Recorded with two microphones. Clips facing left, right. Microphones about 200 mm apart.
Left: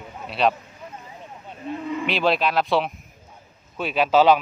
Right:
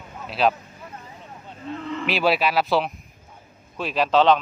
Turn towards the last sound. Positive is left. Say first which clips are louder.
# left 1 dB
turn(degrees=5)  # may be behind; listen again after turning